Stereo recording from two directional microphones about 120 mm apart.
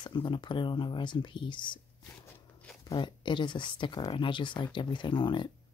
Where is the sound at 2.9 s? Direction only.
40° left (ahead or behind).